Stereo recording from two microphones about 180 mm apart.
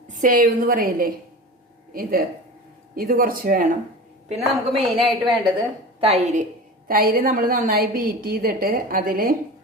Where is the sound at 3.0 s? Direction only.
50° right (ahead or behind).